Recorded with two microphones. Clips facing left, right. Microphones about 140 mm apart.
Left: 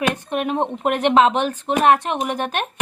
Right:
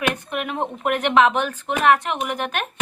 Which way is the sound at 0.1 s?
30° left (ahead or behind).